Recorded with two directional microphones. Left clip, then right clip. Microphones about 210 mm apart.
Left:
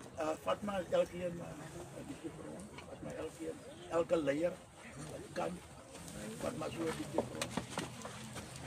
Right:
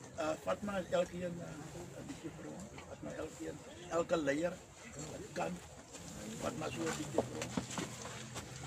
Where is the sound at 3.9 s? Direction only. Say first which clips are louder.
Left 1 dB; centre (ahead or behind).